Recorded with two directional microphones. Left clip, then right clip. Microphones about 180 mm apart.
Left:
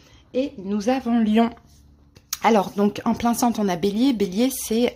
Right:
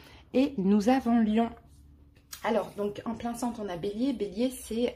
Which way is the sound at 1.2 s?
20° left (ahead or behind).